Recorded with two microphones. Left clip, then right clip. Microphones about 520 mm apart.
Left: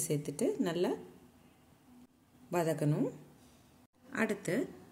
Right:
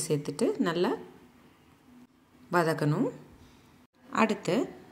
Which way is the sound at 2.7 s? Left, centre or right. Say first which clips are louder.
Right 5 dB; left.